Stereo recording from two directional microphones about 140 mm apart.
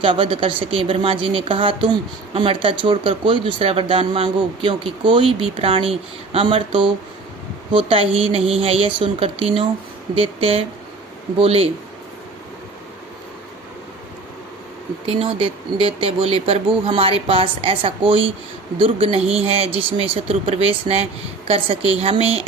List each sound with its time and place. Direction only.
0.0 s a woman's voice: 40° right (ahead or behind)
15.0 s a woman's voice: 40° right (ahead or behind)